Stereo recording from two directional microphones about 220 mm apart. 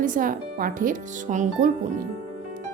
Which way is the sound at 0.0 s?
40° right (ahead or behind).